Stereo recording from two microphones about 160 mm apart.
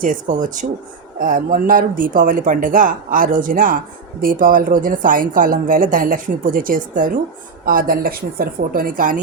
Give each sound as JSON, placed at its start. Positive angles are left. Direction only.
{"t": 0.0, "sound": "speech", "side_deg": -55}